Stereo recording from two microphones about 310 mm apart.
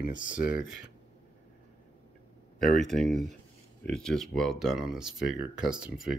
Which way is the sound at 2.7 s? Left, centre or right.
Centre.